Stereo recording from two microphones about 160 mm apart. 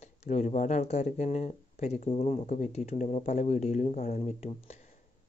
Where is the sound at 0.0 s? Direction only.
45° left (ahead or behind).